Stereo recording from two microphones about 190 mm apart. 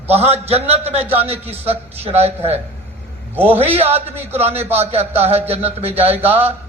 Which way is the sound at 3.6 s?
35° right (ahead or behind).